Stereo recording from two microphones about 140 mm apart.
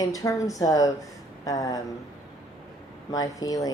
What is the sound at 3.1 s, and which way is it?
Speech, 25° left (ahead or behind).